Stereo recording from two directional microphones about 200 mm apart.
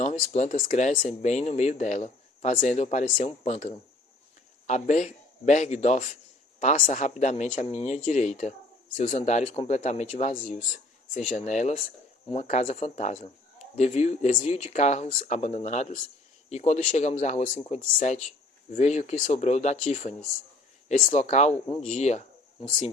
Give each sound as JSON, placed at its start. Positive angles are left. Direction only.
{"t": 0.0, "sound": "speech", "side_deg": 35}